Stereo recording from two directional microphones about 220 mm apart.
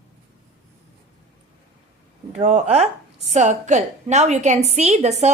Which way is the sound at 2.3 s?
30° right (ahead or behind).